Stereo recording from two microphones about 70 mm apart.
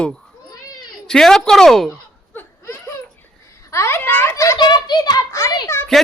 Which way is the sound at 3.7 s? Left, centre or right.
Left.